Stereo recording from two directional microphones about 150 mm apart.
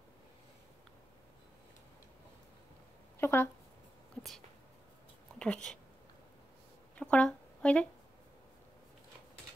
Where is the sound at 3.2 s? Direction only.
15° left (ahead or behind).